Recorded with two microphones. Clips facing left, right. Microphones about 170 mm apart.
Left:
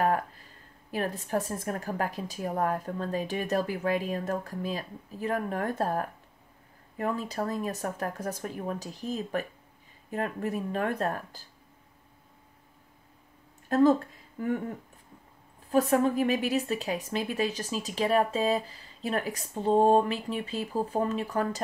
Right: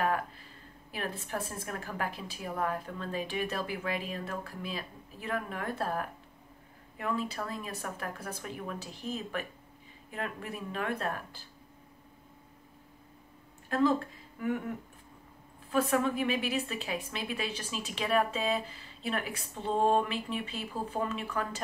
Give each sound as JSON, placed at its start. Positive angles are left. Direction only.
{"t": 0.0, "sound": "a sound", "side_deg": 45}
{"t": 0.9, "sound": "a woman's voice", "side_deg": 40}
{"t": 13.7, "sound": "speech", "side_deg": 40}
{"t": 15.7, "sound": "a woman's voice", "side_deg": 40}